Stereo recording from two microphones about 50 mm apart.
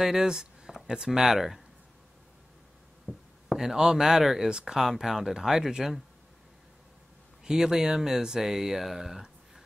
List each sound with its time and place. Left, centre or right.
0.0 s speech: centre
3.1 s a sound: left
3.4 s speech: centre
7.4 s speech: centre